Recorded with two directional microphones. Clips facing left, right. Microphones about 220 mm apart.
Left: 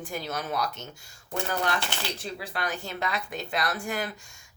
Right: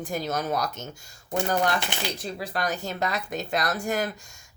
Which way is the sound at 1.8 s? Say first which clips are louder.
Right 2 dB; 15° right (ahead or behind).